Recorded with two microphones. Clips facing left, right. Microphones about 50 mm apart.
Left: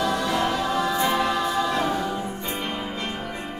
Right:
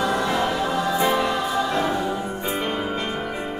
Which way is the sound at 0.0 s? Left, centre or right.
Right.